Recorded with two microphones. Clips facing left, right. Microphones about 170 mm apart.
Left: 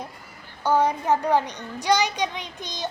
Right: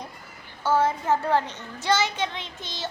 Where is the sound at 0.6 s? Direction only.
15° left (ahead or behind).